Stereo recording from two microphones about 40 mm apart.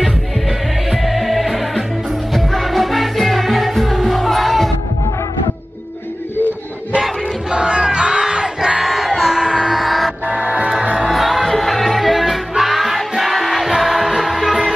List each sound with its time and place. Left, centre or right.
1.0 s music: centre
7.5 s battle cry: right
8.8 s music: centre
9.8 s music: centre
10.4 s music: right
11.1 s music: centre